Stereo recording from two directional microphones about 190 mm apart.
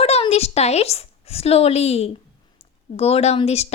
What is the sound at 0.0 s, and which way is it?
A woman's voice, 30° left (ahead or behind).